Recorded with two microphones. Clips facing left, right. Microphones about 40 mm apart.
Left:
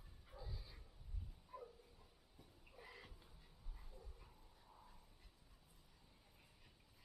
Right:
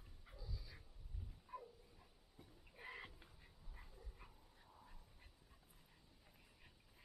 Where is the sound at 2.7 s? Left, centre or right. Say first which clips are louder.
Right 6 dB; right.